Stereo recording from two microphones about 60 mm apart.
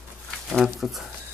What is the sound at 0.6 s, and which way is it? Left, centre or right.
Speech, centre.